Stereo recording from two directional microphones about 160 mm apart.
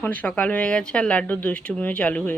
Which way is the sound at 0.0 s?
10° left (ahead or behind).